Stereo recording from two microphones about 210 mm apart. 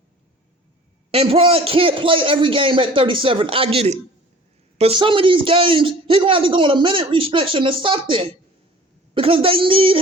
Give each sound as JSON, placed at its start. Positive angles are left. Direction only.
{"t": 1.1, "sound": "a man's voice", "side_deg": -25}